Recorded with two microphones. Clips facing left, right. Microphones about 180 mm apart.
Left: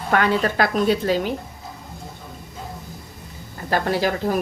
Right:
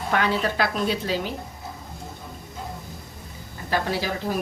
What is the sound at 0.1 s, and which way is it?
A woman's voice, 55° left (ahead or behind).